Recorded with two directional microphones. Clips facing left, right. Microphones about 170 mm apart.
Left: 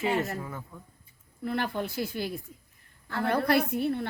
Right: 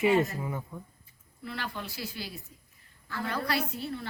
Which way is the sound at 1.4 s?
50° left (ahead or behind).